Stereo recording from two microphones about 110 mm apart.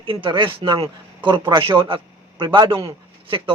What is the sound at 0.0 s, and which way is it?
A man's voice, 50° right (ahead or behind).